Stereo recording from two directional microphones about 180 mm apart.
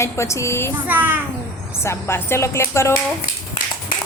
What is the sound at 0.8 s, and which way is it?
Speech, 10° right (ahead or behind).